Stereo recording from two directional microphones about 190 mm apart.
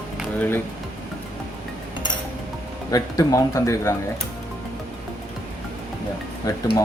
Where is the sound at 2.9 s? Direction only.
15° left (ahead or behind).